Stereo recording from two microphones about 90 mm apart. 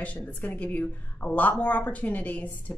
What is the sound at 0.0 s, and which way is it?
A woman's voice, 20° left (ahead or behind).